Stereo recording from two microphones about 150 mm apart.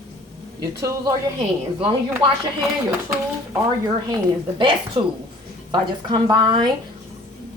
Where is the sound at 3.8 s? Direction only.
30° right (ahead or behind).